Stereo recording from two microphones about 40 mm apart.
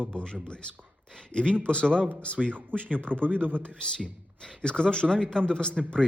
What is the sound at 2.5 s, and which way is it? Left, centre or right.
Speech, right.